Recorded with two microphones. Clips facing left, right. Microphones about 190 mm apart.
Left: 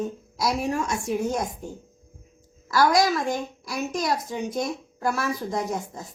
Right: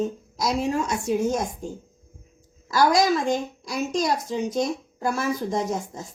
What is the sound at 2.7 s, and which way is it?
A woman's voice, 20° right (ahead or behind).